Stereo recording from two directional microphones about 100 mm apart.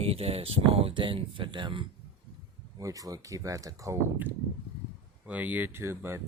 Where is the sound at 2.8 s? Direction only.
35° right (ahead or behind).